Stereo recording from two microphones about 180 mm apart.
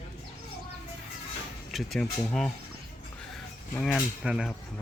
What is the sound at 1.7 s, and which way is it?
Speech, centre (ahead or behind).